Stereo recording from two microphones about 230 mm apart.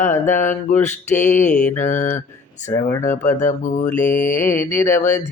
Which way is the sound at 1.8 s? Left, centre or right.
Left.